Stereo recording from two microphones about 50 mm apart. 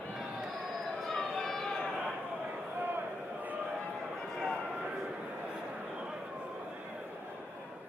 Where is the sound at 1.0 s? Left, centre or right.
Centre.